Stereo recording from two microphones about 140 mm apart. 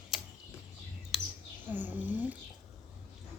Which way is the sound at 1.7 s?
15° right (ahead or behind).